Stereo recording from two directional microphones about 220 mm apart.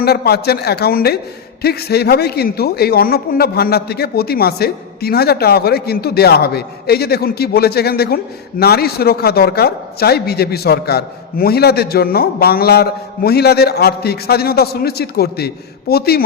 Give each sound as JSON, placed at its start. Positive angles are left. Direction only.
{"t": 0.0, "sound": "a man's voice", "side_deg": 45}